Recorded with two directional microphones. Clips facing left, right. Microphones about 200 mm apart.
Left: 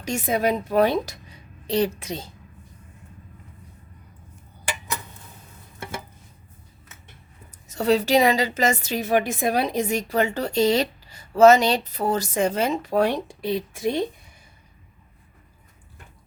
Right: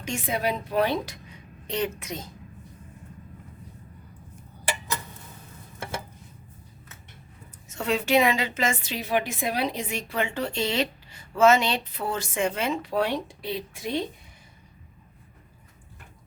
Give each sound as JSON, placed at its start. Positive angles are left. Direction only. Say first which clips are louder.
{"t": 0.0, "sound": "a woman's voice", "louder": "left 5 dB", "side_deg": 40}
{"t": 7.7, "sound": "a woman's voice", "louder": "left 4 dB", "side_deg": 35}